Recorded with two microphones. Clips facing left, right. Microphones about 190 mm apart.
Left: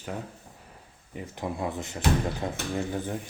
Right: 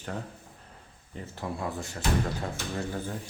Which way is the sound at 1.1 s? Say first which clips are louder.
Left 3 dB; 15° left (ahead or behind).